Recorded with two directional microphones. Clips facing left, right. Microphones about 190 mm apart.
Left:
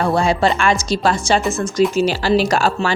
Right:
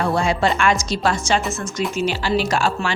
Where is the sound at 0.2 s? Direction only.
35° left (ahead or behind).